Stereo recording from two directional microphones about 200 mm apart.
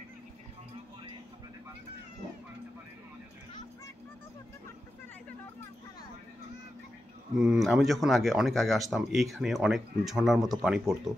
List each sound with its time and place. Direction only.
7.3 s speech: centre (ahead or behind)